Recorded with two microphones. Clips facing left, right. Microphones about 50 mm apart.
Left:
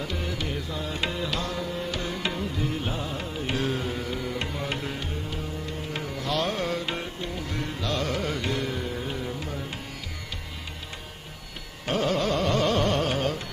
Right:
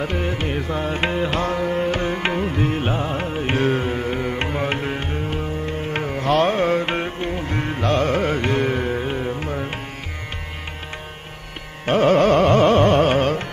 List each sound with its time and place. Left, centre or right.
0.0 s carnatic music: right
11.8 s carnatic music: right